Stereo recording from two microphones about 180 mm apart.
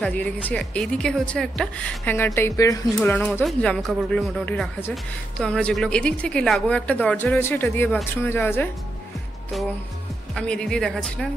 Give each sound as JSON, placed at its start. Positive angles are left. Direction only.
{"t": 0.0, "sound": "speech", "side_deg": 10}
{"t": 3.0, "sound": "a woman's voice", "side_deg": 5}
{"t": 10.3, "sound": "a woman's voice", "side_deg": 5}